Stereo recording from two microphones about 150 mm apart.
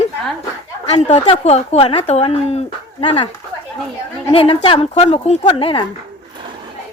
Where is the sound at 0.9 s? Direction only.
40° left (ahead or behind).